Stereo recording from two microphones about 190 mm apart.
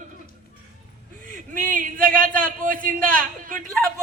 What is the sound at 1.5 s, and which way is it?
A man's voice, 45° right (ahead or behind).